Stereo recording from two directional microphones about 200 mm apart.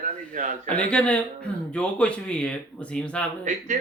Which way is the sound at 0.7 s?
5° left (ahead or behind).